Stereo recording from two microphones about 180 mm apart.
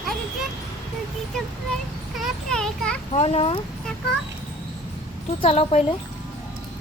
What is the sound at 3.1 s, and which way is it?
Speech, 35° left (ahead or behind).